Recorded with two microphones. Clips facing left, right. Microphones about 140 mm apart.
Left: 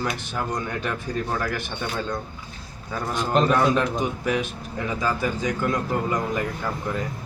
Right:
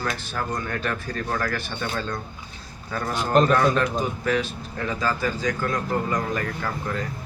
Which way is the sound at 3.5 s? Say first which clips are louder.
Even; 15° left (ahead or behind).